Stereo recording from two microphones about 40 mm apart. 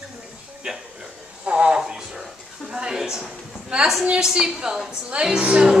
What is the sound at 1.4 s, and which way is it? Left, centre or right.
Speech, right.